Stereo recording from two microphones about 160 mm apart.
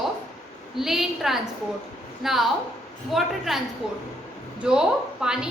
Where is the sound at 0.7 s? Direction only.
Centre (ahead or behind).